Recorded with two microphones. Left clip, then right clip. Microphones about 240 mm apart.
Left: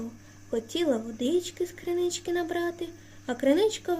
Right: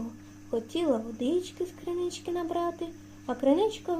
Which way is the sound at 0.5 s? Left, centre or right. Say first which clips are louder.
Left 1 dB; left.